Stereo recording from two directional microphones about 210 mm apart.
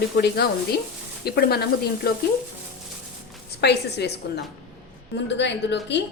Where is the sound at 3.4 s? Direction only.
50° left (ahead or behind).